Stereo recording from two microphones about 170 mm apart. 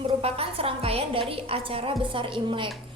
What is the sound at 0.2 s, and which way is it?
A woman's voice, 35° right (ahead or behind).